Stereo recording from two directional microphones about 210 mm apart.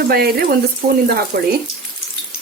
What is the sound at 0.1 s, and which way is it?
Speech, 50° right (ahead or behind).